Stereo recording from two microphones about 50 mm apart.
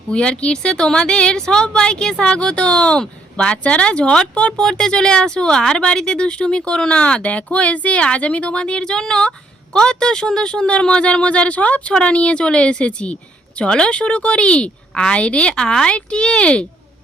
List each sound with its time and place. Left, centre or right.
0.1 s speech: left